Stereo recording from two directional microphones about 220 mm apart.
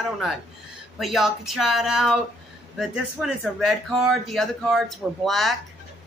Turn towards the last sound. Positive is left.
turn(degrees=0)  # may be behind; listen again after turning